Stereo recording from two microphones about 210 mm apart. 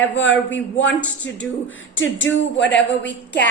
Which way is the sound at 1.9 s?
65° left (ahead or behind).